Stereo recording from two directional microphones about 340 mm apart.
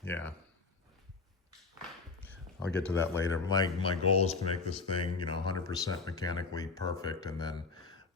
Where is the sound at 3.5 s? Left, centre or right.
Centre.